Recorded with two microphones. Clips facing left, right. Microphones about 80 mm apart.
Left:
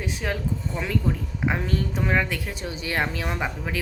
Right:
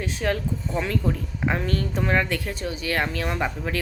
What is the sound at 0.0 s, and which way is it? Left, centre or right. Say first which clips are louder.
Speech: right 3 dB; centre.